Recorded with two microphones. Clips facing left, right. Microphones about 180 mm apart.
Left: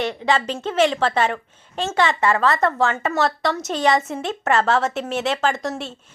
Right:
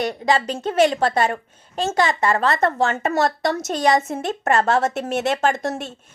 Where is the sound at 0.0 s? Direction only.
40° right (ahead or behind).